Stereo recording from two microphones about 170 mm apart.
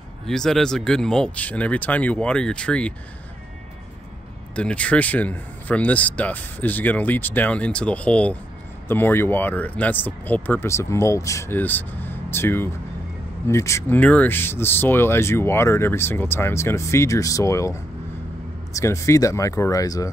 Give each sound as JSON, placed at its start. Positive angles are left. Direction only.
{"t": 0.3, "sound": "speech", "side_deg": 5}
{"t": 4.6, "sound": "speech", "side_deg": 10}
{"t": 18.8, "sound": "speech", "side_deg": 15}